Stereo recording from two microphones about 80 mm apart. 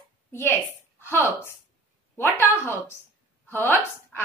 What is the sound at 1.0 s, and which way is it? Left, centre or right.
A woman's voice, left.